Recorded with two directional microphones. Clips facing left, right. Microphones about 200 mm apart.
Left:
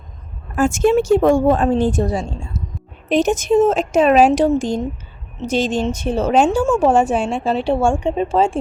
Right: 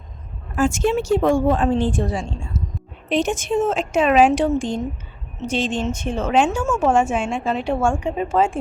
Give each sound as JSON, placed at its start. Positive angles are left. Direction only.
{"t": 0.5, "sound": "speech", "side_deg": 50}